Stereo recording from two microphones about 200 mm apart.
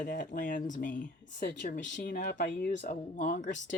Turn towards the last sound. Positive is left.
turn(degrees=40)  # may be behind; listen again after turning